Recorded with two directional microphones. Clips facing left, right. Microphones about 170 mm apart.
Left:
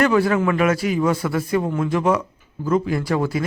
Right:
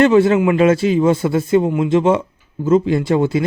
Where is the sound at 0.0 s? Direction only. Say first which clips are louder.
Right 6 dB; 25° right (ahead or behind).